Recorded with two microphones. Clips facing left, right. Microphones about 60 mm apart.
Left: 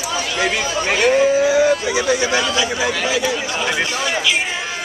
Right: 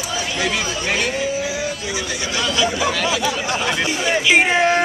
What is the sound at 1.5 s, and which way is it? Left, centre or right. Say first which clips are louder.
Speech: left 9 dB; left.